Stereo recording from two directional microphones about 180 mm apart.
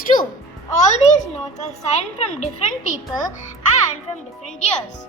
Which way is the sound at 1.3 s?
40° left (ahead or behind).